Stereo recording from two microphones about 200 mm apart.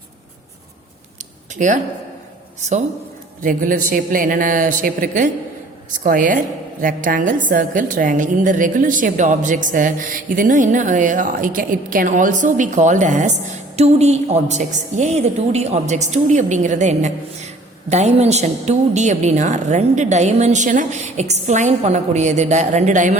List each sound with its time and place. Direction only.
1.5 s a woman's voice: 40° right (ahead or behind)